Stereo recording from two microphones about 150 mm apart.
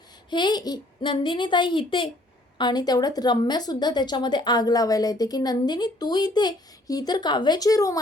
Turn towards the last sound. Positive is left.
turn(degrees=25)  # may be behind; listen again after turning